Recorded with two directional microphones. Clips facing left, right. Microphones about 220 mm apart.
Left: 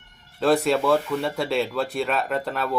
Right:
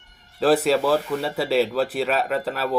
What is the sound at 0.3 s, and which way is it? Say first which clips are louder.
Speech: right 2 dB; centre (ahead or behind).